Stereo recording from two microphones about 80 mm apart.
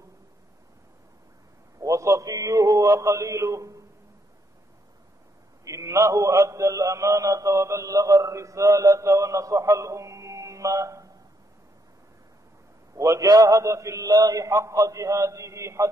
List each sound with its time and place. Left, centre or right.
1.8 s a sound: right
5.7 s a man's voice: right
12.9 s a man's voice: right